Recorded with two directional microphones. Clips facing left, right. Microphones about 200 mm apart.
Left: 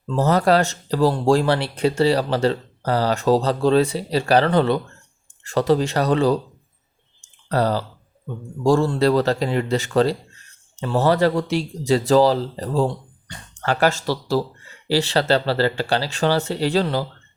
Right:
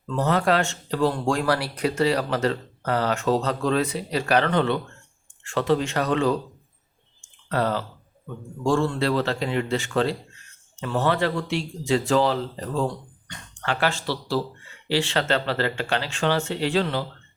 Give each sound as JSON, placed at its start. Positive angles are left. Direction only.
{"t": 0.0, "sound": "speech", "side_deg": 35}
{"t": 7.5, "sound": "speech", "side_deg": 35}